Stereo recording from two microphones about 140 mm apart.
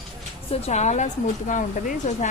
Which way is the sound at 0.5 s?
50° left (ahead or behind).